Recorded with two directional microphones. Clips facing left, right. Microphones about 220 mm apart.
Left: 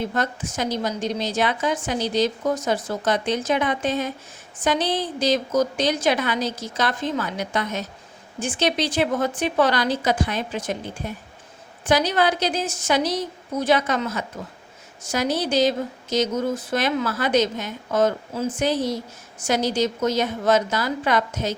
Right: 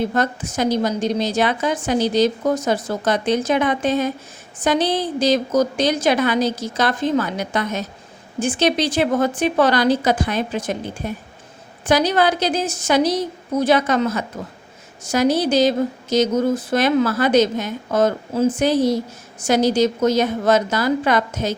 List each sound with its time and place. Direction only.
0.1 s a woman's voice: 40° right (ahead or behind)